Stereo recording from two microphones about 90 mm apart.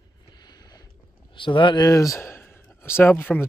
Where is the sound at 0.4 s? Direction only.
50° left (ahead or behind).